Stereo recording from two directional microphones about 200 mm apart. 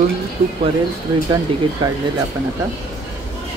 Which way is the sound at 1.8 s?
25° right (ahead or behind).